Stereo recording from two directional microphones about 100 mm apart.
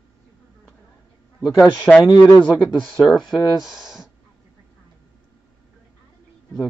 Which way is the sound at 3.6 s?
5° right (ahead or behind).